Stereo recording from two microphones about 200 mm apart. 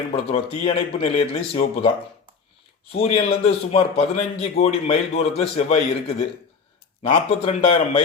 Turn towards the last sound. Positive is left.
turn(degrees=30)  # may be behind; listen again after turning